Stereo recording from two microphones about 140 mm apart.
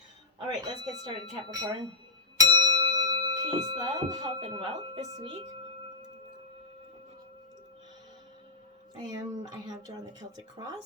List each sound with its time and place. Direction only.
0.3 s speech: 30° right (ahead or behind)
2.4 s bell: 25° right (ahead or behind)
3.8 s speech: 30° right (ahead or behind)
9.1 s speech: 30° right (ahead or behind)